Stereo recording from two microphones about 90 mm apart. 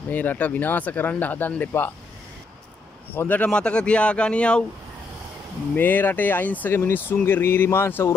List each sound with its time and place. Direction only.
0.1 s speech: 20° left (ahead or behind)
3.1 s speech: 20° left (ahead or behind)
5.8 s speech: 20° left (ahead or behind)